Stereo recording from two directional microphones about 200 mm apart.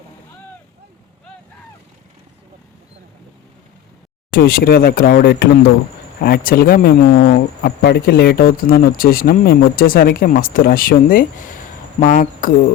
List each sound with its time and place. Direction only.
4.3 s speech: 50° left (ahead or behind)